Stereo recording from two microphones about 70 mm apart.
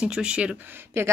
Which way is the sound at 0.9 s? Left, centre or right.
Right.